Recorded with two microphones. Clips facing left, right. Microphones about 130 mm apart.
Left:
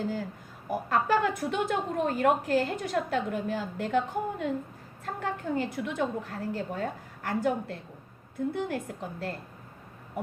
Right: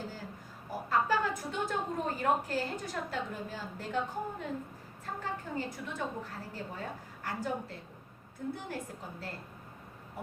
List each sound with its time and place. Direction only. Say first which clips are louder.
0.7 s a woman's voice: left 4 dB; 65° left (ahead or behind)